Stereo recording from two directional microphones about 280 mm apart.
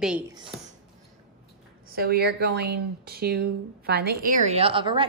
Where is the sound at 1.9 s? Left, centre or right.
Right.